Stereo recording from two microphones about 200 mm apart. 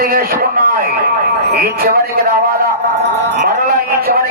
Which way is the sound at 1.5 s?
50° right (ahead or behind).